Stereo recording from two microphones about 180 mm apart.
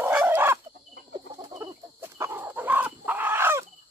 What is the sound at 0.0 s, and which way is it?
Chicken, 10° right (ahead or behind).